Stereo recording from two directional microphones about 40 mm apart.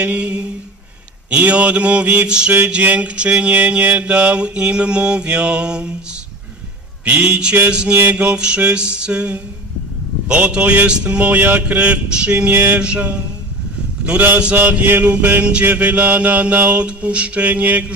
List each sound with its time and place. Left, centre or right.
0.0 s mantra: right
1.5 s mantra: right
7.0 s mantra: right
11.3 s mantra: right
11.7 s mantra: right
12.5 s mantra: right
12.8 s mantra: right
14.5 s mantra: right